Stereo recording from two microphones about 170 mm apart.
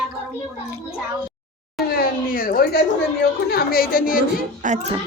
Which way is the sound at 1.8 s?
60° left (ahead or behind).